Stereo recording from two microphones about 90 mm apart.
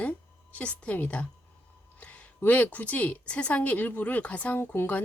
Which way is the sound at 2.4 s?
15° left (ahead or behind).